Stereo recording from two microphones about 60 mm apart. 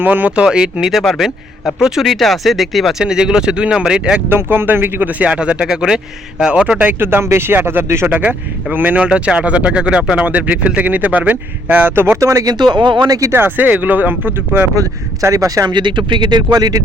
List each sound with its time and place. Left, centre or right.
0.0 s speech: right; by 2.9 s centre
3.0 s speech: centre
4.3 s a man's voice: right; by 6.8 s centre
6.8 s speech: right
8.1 s speech: right
9.0 s a man's voice: centre; by 12.2 s right
12.2 s speech: right
13.6 s a man's voice: right
14.8 s speech: right
16.5 s speech: right